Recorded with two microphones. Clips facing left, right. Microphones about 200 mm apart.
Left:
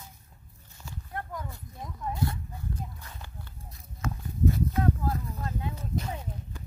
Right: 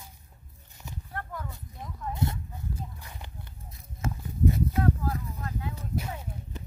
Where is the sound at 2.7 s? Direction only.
15° right (ahead or behind).